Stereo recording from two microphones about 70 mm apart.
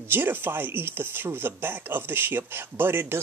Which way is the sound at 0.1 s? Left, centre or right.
Right.